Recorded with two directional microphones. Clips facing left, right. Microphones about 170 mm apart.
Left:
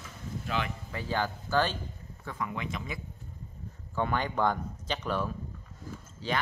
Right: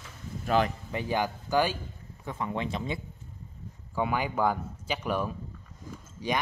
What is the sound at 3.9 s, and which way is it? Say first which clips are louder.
A man's voice: right 1 dB; 10° right (ahead or behind).